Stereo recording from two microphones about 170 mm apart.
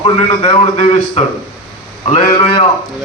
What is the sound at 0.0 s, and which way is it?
A man's voice, 35° left (ahead or behind).